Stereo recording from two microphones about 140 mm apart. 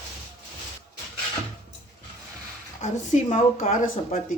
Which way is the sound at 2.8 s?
60° left (ahead or behind).